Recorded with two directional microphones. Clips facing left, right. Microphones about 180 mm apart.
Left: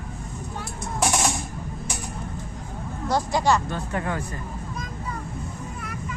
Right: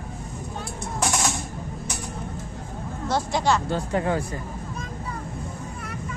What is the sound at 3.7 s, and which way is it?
Speech, 20° right (ahead or behind).